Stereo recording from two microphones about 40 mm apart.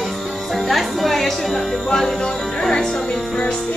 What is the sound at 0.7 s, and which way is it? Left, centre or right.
Music, centre.